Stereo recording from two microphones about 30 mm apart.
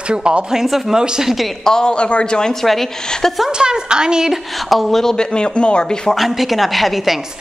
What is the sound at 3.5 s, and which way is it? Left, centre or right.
Speech, right.